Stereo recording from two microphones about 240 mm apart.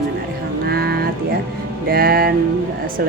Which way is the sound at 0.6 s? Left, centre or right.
Right.